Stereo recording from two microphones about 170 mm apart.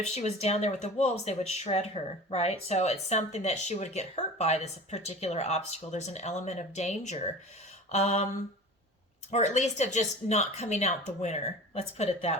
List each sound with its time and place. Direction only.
0.0 s speech: 40° left (ahead or behind)
9.3 s speech: 45° left (ahead or behind)